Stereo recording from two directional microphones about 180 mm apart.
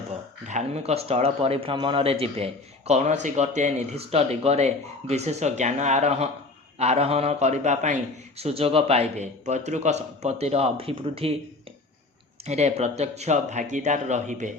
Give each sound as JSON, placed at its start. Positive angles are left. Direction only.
{"t": 0.4, "sound": "a man's voice", "side_deg": -40}
{"t": 12.5, "sound": "a man's voice", "side_deg": -35}